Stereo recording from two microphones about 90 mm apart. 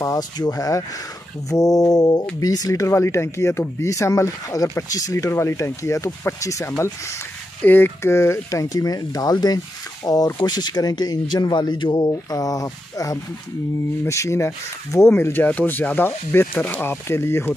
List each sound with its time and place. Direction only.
0.0 s speech: 45° left (ahead or behind)
7.6 s speech: 20° left (ahead or behind)